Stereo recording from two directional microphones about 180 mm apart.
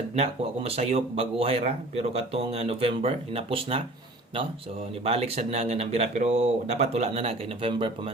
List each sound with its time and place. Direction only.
0.2 s speech: 35° right (ahead or behind)
5.0 s speech: 35° right (ahead or behind)